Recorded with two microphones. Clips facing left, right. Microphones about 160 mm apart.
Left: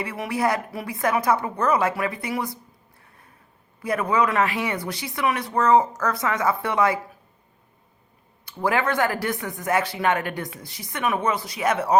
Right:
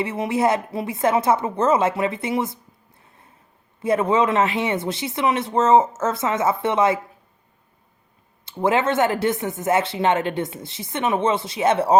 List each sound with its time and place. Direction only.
0.0 s speech: 25° right (ahead or behind)
3.0 s a sound: 20° right (ahead or behind)
3.8 s speech: 25° right (ahead or behind)
8.4 s speech: 25° right (ahead or behind)